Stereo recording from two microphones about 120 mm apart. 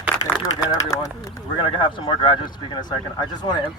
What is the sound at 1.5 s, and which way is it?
Speech, 45° left (ahead or behind).